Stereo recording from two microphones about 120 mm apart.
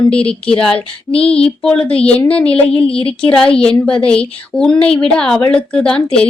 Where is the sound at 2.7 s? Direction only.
50° left (ahead or behind).